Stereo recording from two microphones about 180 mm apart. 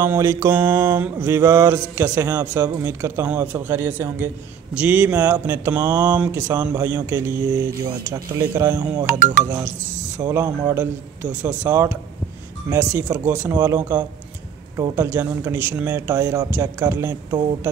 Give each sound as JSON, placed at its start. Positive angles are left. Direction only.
{"t": 0.0, "sound": "speech", "side_deg": -15}
{"t": 10.2, "sound": "speech", "side_deg": -20}